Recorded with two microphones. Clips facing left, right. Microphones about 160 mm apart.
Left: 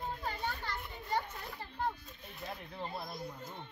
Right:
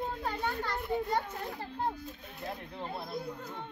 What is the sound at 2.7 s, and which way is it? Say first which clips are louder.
Speech: right 2 dB; 25° right (ahead or behind).